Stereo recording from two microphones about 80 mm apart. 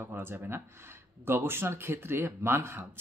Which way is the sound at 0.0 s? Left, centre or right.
Right.